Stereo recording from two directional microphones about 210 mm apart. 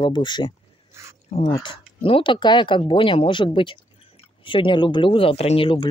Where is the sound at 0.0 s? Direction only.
20° left (ahead or behind).